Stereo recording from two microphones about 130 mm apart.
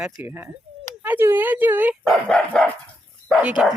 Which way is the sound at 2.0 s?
5° left (ahead or behind).